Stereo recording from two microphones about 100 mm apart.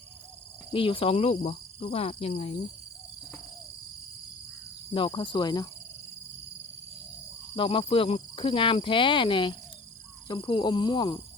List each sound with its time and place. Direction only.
0.7 s speech: 60° left (ahead or behind); by 2.5 s 85° left
4.9 s speech: 55° left (ahead or behind)
7.5 s cricket: 60° left (ahead or behind)
10.2 s speech: 45° left (ahead or behind)